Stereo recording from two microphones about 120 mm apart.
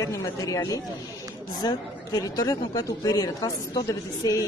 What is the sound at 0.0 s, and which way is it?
Speech, 25° left (ahead or behind).